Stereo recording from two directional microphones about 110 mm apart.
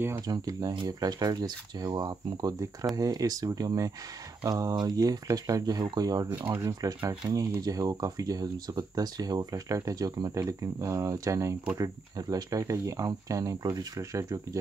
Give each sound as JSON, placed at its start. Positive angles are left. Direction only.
{"t": 0.3, "sound": "speech", "side_deg": -35}